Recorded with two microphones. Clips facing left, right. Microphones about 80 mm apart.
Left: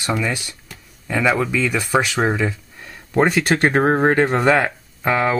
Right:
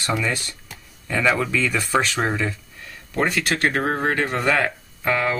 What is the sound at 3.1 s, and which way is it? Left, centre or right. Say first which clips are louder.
Speech: left 6 dB; left.